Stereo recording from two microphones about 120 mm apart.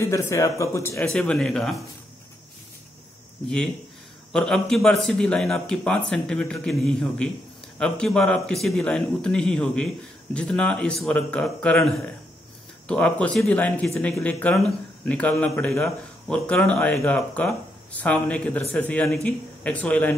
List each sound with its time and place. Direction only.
0.0 s speech: 25° left (ahead or behind)
1.0 s a man's voice: 5° left (ahead or behind)
3.4 s a man's voice: 5° left (ahead or behind)